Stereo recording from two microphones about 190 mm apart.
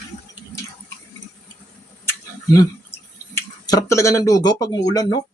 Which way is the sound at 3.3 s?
15° left (ahead or behind).